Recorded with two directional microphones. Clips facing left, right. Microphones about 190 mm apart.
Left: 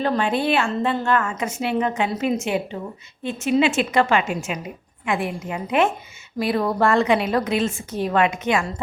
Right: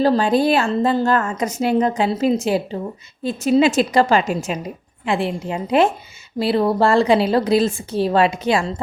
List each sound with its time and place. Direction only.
0.0 s a woman's voice: 35° right (ahead or behind)